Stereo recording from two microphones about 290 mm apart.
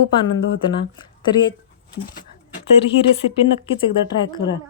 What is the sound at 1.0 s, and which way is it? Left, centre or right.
Speech, centre.